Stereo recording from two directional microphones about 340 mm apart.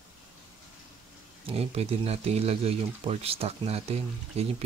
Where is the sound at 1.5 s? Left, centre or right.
Centre.